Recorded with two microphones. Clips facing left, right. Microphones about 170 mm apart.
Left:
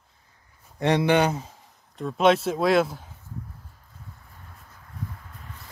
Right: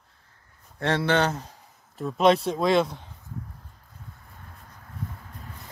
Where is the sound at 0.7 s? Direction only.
15° left (ahead or behind).